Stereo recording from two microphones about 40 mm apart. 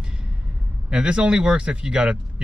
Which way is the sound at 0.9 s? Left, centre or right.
Right.